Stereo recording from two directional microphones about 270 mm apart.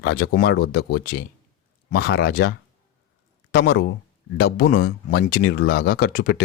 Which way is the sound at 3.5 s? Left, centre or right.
Left.